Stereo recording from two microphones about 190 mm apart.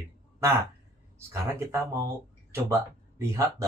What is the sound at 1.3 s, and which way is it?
Speech, 15° right (ahead or behind).